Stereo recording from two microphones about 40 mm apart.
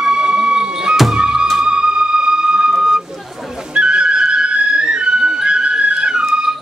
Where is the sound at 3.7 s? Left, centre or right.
Right.